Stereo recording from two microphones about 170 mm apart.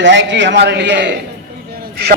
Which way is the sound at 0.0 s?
90° right.